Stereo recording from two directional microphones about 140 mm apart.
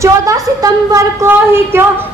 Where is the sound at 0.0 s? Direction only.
20° right (ahead or behind).